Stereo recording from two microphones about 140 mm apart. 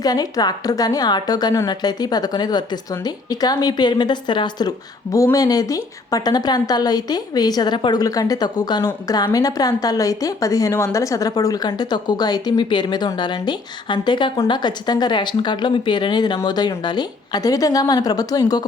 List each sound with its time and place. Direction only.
0.0 s a woman's voice: 30° left (ahead or behind)